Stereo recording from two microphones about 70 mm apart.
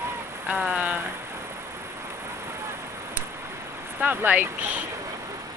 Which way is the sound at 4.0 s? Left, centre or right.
Right.